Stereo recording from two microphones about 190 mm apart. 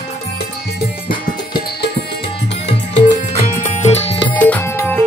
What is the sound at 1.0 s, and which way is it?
Music, 25° left (ahead or behind).